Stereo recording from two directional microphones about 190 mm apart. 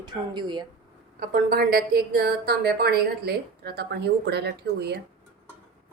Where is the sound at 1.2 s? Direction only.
50° right (ahead or behind).